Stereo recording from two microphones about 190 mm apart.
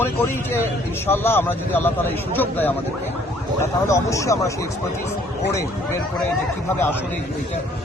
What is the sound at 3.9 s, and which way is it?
Speech, 15° left (ahead or behind).